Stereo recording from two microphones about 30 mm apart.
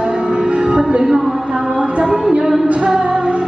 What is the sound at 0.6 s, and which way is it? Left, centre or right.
Music, right.